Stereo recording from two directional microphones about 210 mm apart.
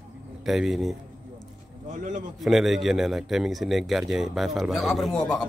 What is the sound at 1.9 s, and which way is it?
Speech, 40° right (ahead or behind).